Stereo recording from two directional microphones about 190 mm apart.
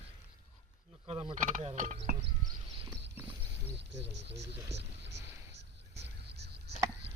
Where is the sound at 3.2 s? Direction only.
10° right (ahead or behind).